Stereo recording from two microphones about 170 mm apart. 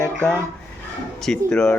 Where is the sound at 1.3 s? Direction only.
5° left (ahead or behind).